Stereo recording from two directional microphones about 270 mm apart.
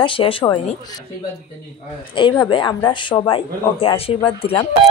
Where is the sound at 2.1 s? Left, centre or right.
Centre.